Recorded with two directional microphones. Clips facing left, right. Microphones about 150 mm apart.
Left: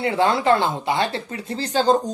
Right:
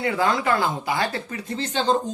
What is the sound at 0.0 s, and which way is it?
Speech, 30° left (ahead or behind).